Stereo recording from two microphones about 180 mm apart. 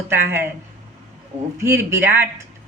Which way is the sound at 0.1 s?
15° right (ahead or behind).